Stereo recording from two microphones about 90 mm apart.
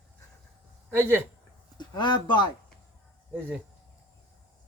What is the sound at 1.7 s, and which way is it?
Speech, 55° left (ahead or behind).